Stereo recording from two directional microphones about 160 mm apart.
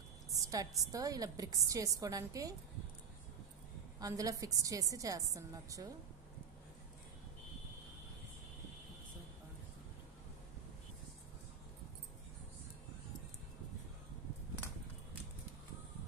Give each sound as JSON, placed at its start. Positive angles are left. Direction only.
{"t": 0.3, "sound": "a woman's voice", "side_deg": -20}
{"t": 4.0, "sound": "a woman's voice", "side_deg": -20}